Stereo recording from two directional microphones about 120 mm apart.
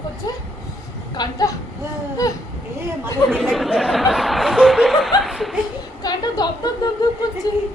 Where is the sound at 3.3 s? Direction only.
5° left (ahead or behind).